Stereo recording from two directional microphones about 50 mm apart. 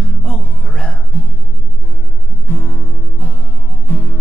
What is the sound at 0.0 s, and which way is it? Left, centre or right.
Music, centre.